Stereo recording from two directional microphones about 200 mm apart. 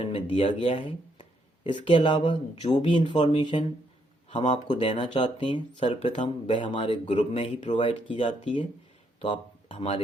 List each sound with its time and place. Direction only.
0.0 s speech: 25° left (ahead or behind)